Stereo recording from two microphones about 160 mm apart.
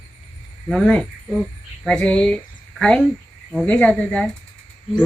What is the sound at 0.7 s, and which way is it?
Speech, 5° left (ahead or behind).